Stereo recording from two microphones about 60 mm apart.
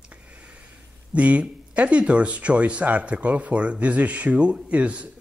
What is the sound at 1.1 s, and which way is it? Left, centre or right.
Speech, right.